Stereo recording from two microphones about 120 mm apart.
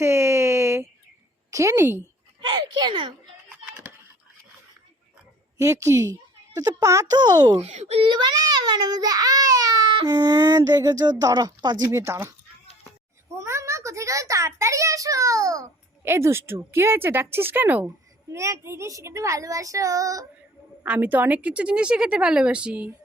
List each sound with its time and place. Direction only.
0.0 s a sound: 25° right (ahead or behind)
1.5 s a woman's voice: 25° right (ahead or behind)
2.5 s a child's voice: 40° right (ahead or behind)
5.5 s a woman's voice: 25° right (ahead or behind)
7.6 s a child's voice: 65° right (ahead or behind)
8.1 s a child's voice: 35° right (ahead or behind)
11.9 s a child's voice: 25° right (ahead or behind)
13.3 s a child's voice: 25° right (ahead or behind)
20.8 s speech: 15° right (ahead or behind)